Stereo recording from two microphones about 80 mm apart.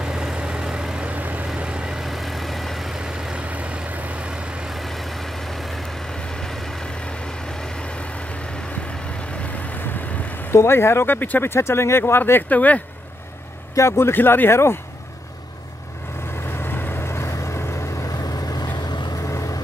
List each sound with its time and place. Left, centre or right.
0.0 s vehicle: centre
4.7 s vehicle: centre
9.2 s speech: centre
13.7 s speech: left
16.5 s vehicle: left
18.2 s vehicle: left
19.2 s vehicle: left